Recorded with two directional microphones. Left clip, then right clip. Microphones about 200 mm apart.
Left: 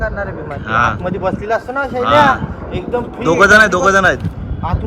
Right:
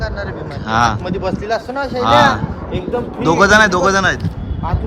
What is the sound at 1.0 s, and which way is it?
Speech, 35° left (ahead or behind).